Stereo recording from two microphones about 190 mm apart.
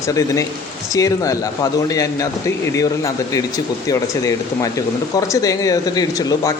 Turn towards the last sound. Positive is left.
turn(degrees=20)  # may be behind; listen again after turning